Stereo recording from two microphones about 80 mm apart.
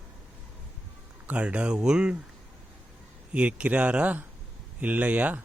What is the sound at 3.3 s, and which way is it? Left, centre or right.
Speech, centre.